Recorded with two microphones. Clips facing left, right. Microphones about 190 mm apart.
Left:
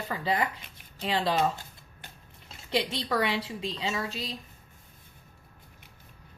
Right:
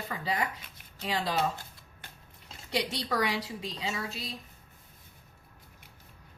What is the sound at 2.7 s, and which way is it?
Speech, 25° left (ahead or behind).